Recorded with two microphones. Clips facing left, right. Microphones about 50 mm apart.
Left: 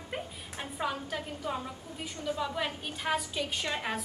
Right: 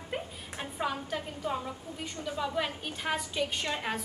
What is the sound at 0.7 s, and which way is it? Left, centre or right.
A woman's voice, centre.